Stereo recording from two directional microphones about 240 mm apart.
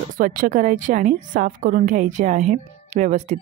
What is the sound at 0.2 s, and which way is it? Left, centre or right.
A woman's voice, right.